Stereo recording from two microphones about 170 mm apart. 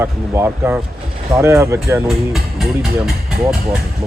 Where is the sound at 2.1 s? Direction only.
Centre (ahead or behind).